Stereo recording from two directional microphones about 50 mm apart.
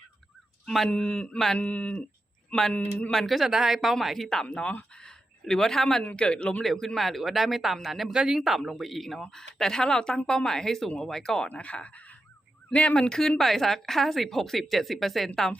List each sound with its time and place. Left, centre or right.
0.9 s speech: centre
2.7 s speech: left
3.1 s speech: centre
4.4 s speech: left
5.0 s a sound: centre
6.1 s speech: left
6.6 s speech: centre
11.4 s speech: left
13.1 s speech: centre